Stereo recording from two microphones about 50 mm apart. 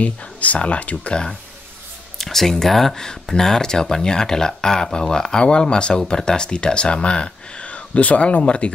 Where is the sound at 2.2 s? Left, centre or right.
Centre.